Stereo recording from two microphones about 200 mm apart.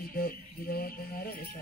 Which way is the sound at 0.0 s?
50° left (ahead or behind).